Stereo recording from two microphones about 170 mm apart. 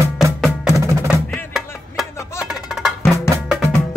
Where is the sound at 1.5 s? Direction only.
Centre (ahead or behind).